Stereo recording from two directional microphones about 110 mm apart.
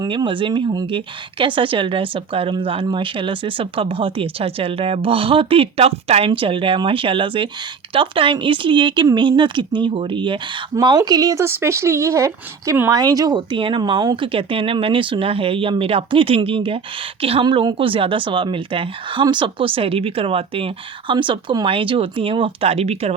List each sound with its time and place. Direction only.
0.1 s a woman's voice: 50° right (ahead or behind); by 11.4 s 35° right (ahead or behind)
11.4 s speech: 25° right (ahead or behind)
12.9 s a woman's voice: 35° right (ahead or behind); by 17.4 s 60° right (ahead or behind)
17.4 s a woman's voice: 45° right (ahead or behind); by 23.1 s 70° right (ahead or behind)